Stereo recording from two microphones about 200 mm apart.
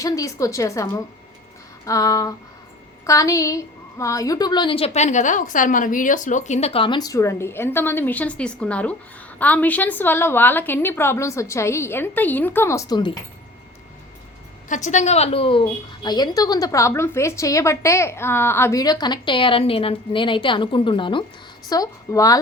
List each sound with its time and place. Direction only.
0.0 s a woman's voice: 15° left (ahead or behind)
14.7 s a woman's voice: 35° left (ahead or behind); by 22.4 s 15° left (ahead or behind)